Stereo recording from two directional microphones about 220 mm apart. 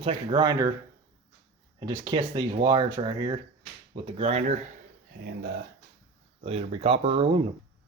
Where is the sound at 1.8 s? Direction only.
20° right (ahead or behind).